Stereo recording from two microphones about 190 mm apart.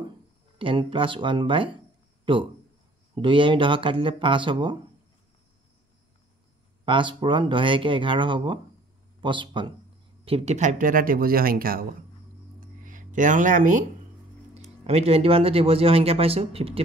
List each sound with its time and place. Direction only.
0.6 s speech: 25° right (ahead or behind)
6.9 s speech: 25° right (ahead or behind); by 11.9 s 50° right (ahead or behind)
12.5 s a sound: 45° right (ahead or behind)
14.5 s speech: 35° right (ahead or behind)